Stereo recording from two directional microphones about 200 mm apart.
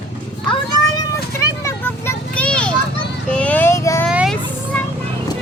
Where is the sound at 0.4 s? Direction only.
25° left (ahead or behind).